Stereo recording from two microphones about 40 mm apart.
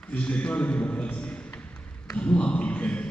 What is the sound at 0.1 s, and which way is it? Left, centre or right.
Speech, left.